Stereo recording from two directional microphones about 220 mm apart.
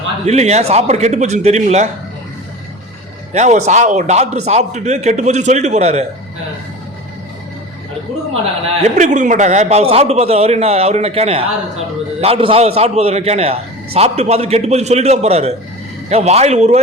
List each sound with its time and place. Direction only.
0.3 s a man's voice: 30° right (ahead or behind)
3.3 s a man's voice: 30° right (ahead or behind)
8.8 s a man's voice: 30° right (ahead or behind)